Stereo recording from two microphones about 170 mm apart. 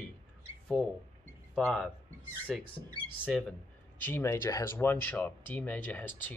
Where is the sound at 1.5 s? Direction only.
Centre (ahead or behind).